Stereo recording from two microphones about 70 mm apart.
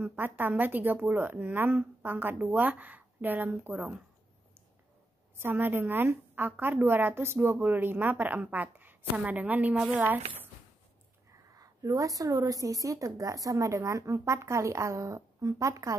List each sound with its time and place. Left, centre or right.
0.0 s a woman's voice: right
5.4 s a woman's voice: right
11.5 s a woman's voice: right